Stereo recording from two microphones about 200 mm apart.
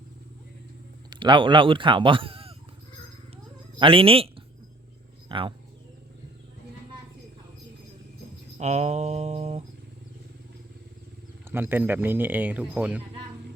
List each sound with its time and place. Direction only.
1.1 s speech: 25° right (ahead or behind)
3.8 s speech: 25° right (ahead or behind)
8.5 s mantra: 35° right (ahead or behind)
11.5 s speech: 10° right (ahead or behind)